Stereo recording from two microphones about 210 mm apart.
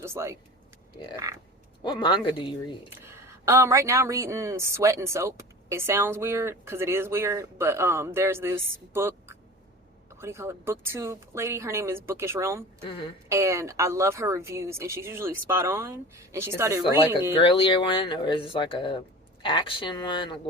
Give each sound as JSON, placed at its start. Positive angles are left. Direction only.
{"t": 0.0, "sound": "speech", "side_deg": -10}
{"t": 1.8, "sound": "speech", "side_deg": 20}
{"t": 2.9, "sound": "speech", "side_deg": -10}
{"t": 17.4, "sound": "speech", "side_deg": 25}